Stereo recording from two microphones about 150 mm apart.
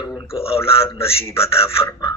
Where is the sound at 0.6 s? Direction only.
20° left (ahead or behind).